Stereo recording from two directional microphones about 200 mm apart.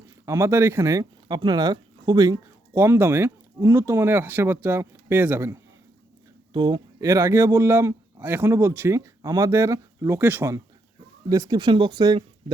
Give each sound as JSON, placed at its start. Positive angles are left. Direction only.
{"t": 0.3, "sound": "speech", "side_deg": -15}
{"t": 6.5, "sound": "speech", "side_deg": -20}